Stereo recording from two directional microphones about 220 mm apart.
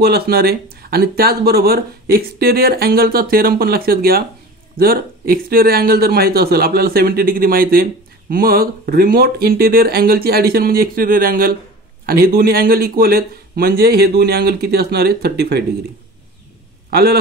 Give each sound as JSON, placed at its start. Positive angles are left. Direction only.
{"t": 0.0, "sound": "speech", "side_deg": -45}
{"t": 16.9, "sound": "speech", "side_deg": -45}